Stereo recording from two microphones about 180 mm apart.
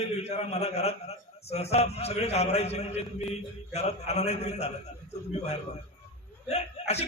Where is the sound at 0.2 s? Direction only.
35° left (ahead or behind).